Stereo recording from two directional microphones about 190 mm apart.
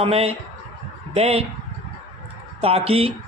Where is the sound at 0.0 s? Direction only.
30° right (ahead or behind).